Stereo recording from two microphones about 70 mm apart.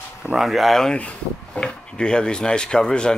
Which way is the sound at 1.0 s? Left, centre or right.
Centre.